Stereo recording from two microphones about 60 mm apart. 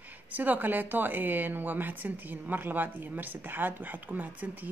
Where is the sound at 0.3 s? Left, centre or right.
Right.